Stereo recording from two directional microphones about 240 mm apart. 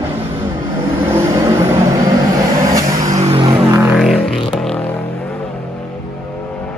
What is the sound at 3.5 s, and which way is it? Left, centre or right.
Music, centre.